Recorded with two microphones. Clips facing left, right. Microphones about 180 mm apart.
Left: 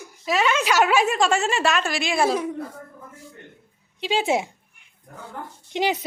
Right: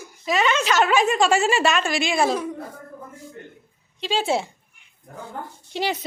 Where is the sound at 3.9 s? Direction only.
15° left (ahead or behind).